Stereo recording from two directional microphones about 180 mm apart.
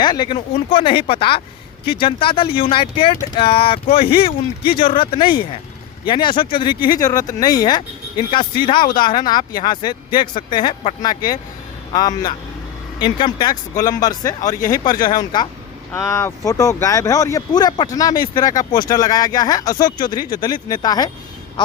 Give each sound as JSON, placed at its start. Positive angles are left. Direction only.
{"t": 0.0, "sound": "speech", "side_deg": 25}
{"t": 15.9, "sound": "speech", "side_deg": 15}